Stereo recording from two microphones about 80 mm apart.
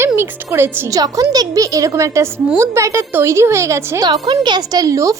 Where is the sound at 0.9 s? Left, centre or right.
Right.